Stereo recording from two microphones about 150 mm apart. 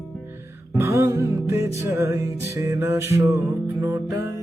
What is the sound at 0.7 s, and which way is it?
Music, 20° right (ahead or behind).